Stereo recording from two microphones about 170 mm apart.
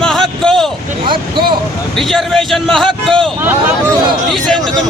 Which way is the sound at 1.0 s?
30° right (ahead or behind).